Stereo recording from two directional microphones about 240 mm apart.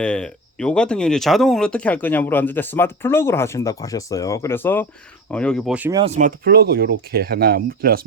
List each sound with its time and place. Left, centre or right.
0.0 s speech: centre
6.0 s speech: right